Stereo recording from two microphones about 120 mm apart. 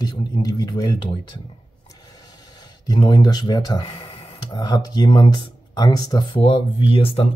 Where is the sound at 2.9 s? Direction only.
35° left (ahead or behind).